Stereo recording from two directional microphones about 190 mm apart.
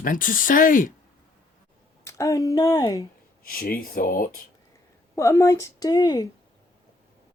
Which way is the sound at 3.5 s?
50° left (ahead or behind).